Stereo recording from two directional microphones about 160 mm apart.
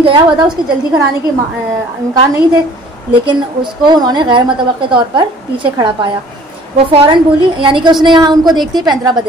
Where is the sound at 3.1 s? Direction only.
30° right (ahead or behind).